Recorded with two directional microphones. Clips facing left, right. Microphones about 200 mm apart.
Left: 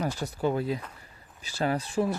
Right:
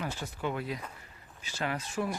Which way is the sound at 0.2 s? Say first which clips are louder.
Left 7 dB; 40° left (ahead or behind).